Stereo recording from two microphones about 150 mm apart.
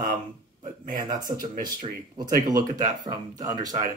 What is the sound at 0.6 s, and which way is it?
Speech, 60° right (ahead or behind).